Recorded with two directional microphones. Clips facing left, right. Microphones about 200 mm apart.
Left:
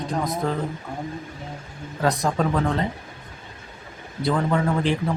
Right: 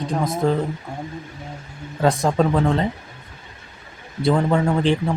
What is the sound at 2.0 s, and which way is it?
Speech, 30° right (ahead or behind).